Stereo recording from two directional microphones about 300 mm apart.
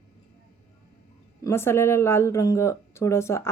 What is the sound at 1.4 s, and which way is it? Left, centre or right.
Speech, centre.